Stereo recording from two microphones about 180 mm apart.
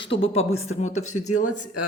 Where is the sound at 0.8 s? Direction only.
40° left (ahead or behind).